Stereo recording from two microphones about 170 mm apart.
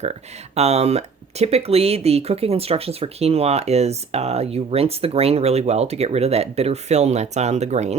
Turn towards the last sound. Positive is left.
turn(degrees=-40)  # may be behind; listen again after turning